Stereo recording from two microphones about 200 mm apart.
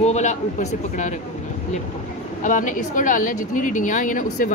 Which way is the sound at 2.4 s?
40° left (ahead or behind).